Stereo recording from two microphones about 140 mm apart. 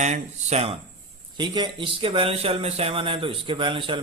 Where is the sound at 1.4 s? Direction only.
35° right (ahead or behind).